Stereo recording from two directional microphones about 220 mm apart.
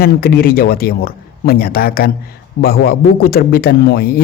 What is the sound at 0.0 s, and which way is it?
A man's voice, 45° left (ahead or behind).